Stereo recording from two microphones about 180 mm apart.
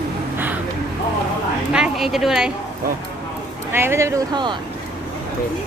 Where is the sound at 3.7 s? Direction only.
15° right (ahead or behind).